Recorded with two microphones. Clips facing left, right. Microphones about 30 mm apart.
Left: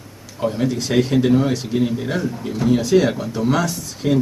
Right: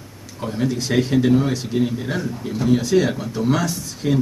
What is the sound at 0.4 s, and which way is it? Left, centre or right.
Speech, centre.